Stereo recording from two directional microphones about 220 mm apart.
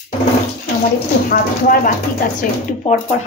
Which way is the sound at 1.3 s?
40° left (ahead or behind).